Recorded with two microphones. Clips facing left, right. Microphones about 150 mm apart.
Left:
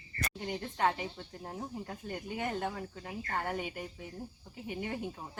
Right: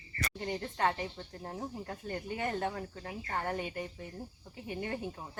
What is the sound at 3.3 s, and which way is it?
Speech, 10° left (ahead or behind).